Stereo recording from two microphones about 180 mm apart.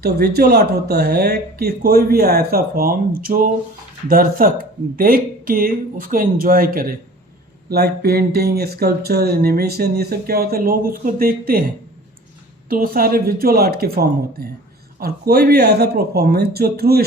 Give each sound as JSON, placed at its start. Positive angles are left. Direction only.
{"t": 0.0, "sound": "speech", "side_deg": -60}
{"t": 12.6, "sound": "speech", "side_deg": -50}